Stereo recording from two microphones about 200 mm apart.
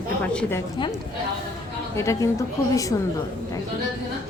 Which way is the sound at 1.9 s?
15° left (ahead or behind).